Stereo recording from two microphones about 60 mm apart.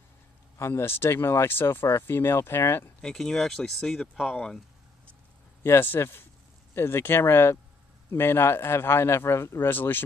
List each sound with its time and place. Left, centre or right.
0.6 s speech: left
3.0 s speech: centre
5.6 s speech: left
9.7 s speech: left